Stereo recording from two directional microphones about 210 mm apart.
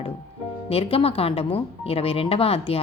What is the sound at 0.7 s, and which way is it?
A woman's voice, 30° left (ahead or behind).